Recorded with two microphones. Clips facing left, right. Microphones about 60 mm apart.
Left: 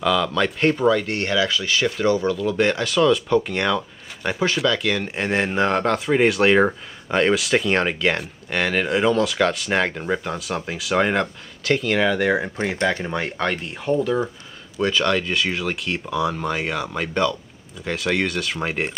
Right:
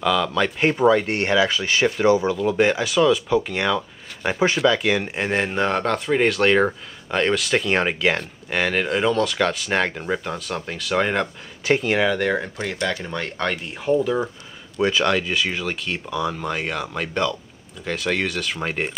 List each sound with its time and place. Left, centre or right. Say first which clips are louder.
0.0 s speech: even; centre; by 1.9 s right
2.0 s speech: right 3 dB; centre
4.3 s speech: right 2 dB; centre
11.6 s speech: right 1 dB; centre
12.0 s speech: left 1 dB; centre
13.4 s speech: left 1 dB; centre
14.8 s speech: right 1 dB; centre